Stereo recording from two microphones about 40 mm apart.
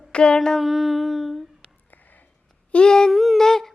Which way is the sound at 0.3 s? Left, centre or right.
Centre.